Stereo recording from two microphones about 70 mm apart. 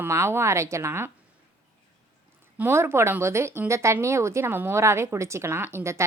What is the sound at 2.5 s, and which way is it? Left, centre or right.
Speech, right.